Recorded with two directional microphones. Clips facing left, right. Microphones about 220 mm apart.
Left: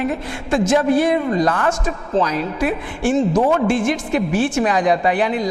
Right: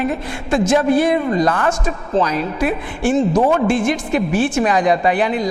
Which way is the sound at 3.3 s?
30° right (ahead or behind).